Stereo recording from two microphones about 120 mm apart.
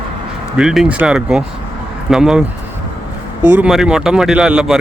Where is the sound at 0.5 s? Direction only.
5° right (ahead or behind).